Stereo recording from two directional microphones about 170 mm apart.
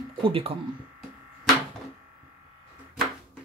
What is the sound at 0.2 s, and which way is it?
Speech, 35° right (ahead or behind).